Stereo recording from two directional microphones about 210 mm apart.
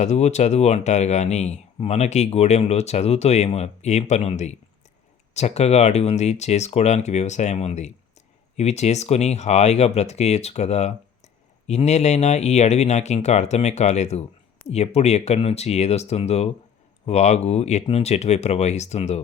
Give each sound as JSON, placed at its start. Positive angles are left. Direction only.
{"t": 0.0, "sound": "speech", "side_deg": 35}